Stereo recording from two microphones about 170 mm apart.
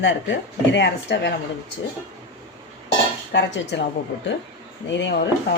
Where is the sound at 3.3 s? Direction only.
90° left.